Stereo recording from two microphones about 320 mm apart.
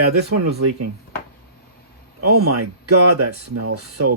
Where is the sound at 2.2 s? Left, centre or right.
Right.